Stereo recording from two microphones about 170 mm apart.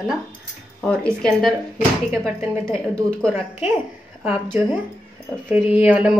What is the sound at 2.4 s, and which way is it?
Speech, 15° right (ahead or behind).